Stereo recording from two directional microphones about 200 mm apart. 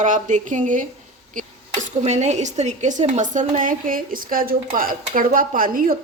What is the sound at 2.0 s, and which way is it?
A woman's voice, 35° right (ahead or behind).